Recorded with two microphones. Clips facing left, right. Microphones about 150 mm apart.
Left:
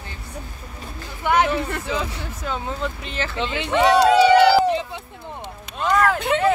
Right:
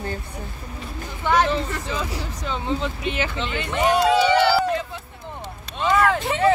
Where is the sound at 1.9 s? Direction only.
10° left (ahead or behind); by 3.3 s 5° right (ahead or behind).